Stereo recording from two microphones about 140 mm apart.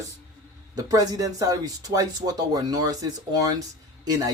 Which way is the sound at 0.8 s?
25° right (ahead or behind).